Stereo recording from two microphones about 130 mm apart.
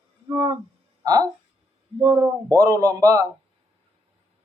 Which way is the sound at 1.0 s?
30° right (ahead or behind).